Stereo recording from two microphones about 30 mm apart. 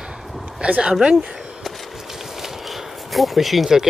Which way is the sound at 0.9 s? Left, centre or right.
Centre.